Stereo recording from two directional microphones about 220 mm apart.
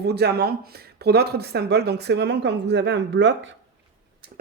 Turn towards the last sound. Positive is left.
turn(degrees=-55)  # may be behind; listen again after turning